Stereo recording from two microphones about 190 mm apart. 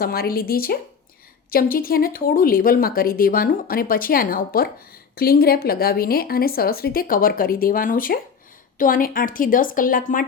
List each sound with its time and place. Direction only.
0.0 s speech: 50° left (ahead or behind)